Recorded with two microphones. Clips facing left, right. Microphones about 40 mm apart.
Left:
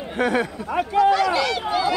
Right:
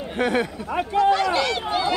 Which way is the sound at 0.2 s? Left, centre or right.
Right.